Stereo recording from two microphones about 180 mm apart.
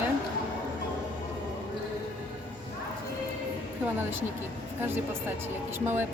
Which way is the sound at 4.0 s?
10° right (ahead or behind).